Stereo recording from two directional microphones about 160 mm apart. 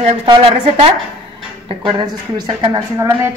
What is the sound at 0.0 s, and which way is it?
A woman's voice, 35° right (ahead or behind).